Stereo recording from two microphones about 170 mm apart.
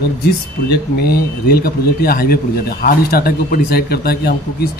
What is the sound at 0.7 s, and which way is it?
A man's voice, 70° left (ahead or behind).